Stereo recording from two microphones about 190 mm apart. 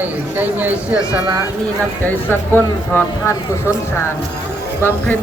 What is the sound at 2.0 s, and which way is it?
Speech, 10° left (ahead or behind).